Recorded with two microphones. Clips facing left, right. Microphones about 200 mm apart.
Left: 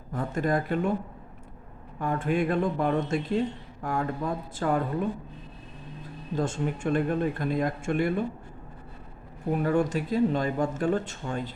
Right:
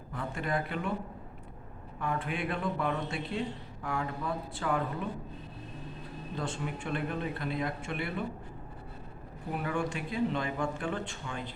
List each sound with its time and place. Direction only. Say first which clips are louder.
0.1 s speech: left 7 dB; 40° left (ahead or behind)
2.0 s speech: left 7 dB; 45° left (ahead or behind)
6.3 s speech: left 8 dB; 45° left (ahead or behind)
9.5 s speech: left 8 dB; 40° left (ahead or behind)